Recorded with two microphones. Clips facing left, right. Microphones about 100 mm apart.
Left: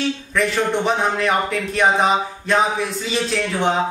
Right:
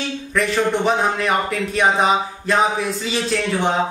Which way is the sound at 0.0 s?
Centre (ahead or behind).